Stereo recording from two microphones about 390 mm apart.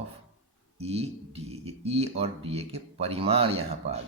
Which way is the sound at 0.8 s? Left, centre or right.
Centre.